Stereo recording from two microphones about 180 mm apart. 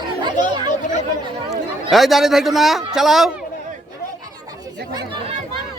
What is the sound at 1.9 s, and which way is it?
Speech, centre (ahead or behind).